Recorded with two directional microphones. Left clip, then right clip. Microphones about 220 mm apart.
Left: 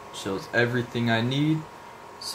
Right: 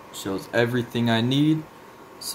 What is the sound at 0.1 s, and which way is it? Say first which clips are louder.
Speech: right 1 dB; 15° right (ahead or behind).